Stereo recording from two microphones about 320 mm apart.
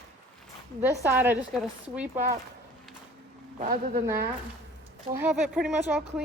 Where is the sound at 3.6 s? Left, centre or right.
Right.